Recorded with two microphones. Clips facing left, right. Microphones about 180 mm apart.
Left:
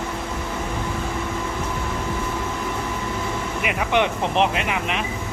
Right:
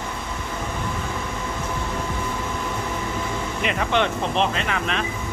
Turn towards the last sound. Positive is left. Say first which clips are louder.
# left 1 dB
turn(degrees=15)  # may be behind; listen again after turning